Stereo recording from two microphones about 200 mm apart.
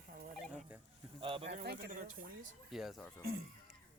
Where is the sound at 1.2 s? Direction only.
25° right (ahead or behind).